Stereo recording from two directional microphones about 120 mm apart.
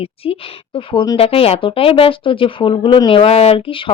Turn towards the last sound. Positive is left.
turn(degrees=50)  # may be behind; listen again after turning